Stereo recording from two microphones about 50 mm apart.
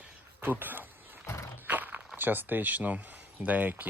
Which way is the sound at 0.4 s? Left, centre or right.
Right.